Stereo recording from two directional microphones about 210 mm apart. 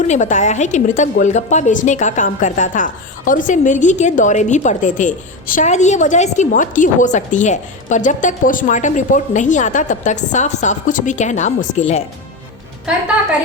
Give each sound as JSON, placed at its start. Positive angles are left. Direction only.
{"t": 0.1, "sound": "a woman's voice", "side_deg": 35}